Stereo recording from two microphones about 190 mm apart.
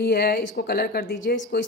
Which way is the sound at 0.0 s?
55° left (ahead or behind).